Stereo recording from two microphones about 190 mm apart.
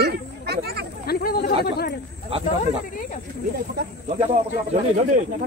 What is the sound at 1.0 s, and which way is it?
Speech, 55° left (ahead or behind).